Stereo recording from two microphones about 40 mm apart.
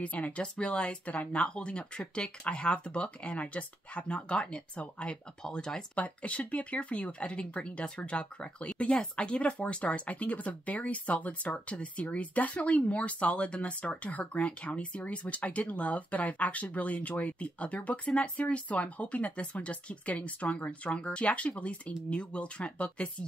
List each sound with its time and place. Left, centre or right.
0.0 s speech: left
0.4 s speech: left
1.0 s speech: left
1.4 s speech: left
5.9 s speech: left